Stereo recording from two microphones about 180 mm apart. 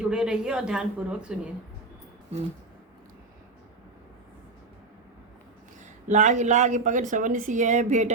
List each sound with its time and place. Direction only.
0.0 s a woman's voice: 5° right (ahead or behind)
5.8 s a woman's voice: 40° right (ahead or behind)